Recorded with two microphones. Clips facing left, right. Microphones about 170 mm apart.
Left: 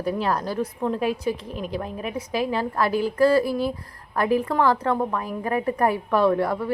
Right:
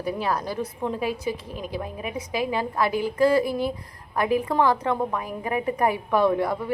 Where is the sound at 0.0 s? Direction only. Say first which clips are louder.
Left 2 dB; 10° right (ahead or behind).